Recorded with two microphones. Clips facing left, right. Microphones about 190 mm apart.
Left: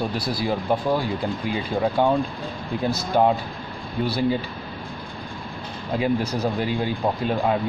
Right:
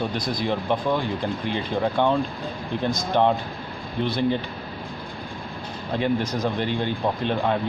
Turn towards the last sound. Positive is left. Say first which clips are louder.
# left 1 dB
turn(degrees=10)  # may be behind; listen again after turning